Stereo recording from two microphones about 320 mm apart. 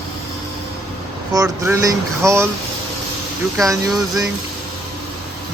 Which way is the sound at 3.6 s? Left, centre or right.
Centre.